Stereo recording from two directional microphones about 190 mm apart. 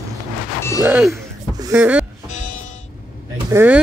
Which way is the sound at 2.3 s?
40° left (ahead or behind).